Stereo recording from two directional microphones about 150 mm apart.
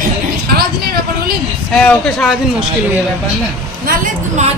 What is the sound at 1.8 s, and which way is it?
Speech, centre (ahead or behind).